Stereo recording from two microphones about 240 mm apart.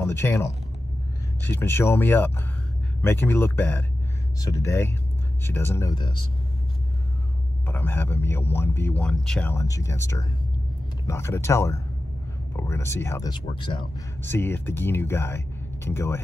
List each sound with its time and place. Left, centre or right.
0.0 s a man's voice: centre
7.6 s a man's voice: centre
14.2 s a man's voice: centre